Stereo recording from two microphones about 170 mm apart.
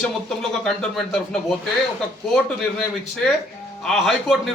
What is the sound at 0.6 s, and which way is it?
A man's voice, 5° left (ahead or behind).